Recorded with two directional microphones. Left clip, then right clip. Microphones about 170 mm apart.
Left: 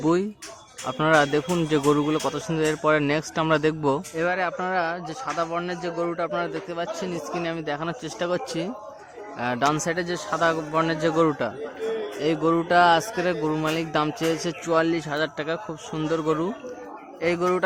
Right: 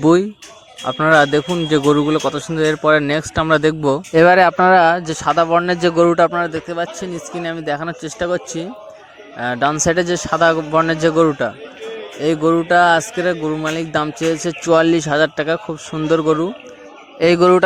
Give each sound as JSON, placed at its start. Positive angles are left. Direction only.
{"t": 0.0, "sound": "speech", "side_deg": -25}
{"t": 4.1, "sound": "a man's voice", "side_deg": -50}
{"t": 6.3, "sound": "speech", "side_deg": -30}
{"t": 9.8, "sound": "speech", "side_deg": -30}
{"t": 17.2, "sound": "a man's voice", "side_deg": -40}